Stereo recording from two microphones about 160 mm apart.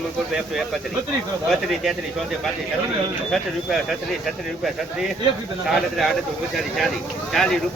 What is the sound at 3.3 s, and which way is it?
Speech, centre (ahead or behind).